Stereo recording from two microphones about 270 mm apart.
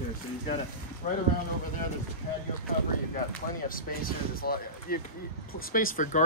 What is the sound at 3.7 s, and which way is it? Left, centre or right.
Speech, left.